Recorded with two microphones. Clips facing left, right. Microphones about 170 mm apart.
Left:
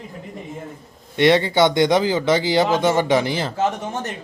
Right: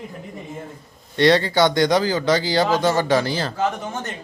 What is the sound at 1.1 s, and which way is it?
A man's voice, 20° left (ahead or behind).